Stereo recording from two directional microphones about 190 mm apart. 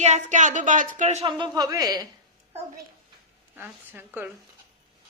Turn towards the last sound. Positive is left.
turn(degrees=-10)  # may be behind; listen again after turning